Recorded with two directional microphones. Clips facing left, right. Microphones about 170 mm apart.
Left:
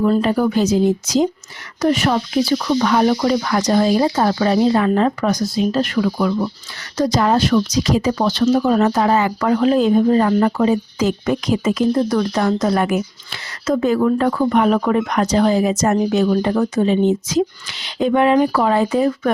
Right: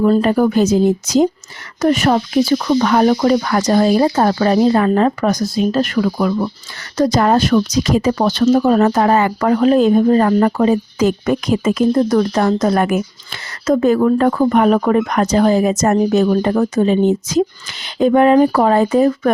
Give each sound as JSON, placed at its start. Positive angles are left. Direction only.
{"t": 0.0, "sound": "speech", "side_deg": -45}